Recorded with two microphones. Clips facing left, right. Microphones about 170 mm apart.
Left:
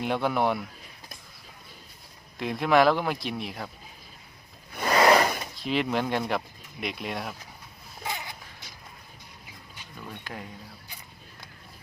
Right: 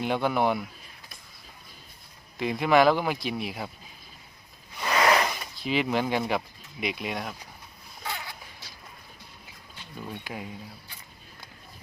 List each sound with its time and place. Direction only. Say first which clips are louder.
0.0 s speech: right 1 dB; centre (ahead or behind)
2.4 s speech: right 1 dB; centre (ahead or behind)
4.8 s zipper: left 3 dB; 35° left (ahead or behind)
5.5 s speech: right 2 dB; centre (ahead or behind)
8.0 s a sound: left 1 dB; 15° left (ahead or behind)
10.3 s speech: even; 10° right (ahead or behind)